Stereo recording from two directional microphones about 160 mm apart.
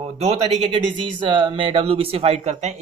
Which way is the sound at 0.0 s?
40° right (ahead or behind).